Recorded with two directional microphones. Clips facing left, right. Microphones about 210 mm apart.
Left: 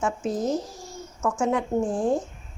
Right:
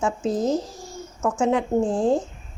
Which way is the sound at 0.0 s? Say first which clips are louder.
Right 3 dB; 30° right (ahead or behind).